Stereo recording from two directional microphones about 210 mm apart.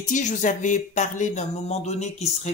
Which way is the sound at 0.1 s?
35° left (ahead or behind).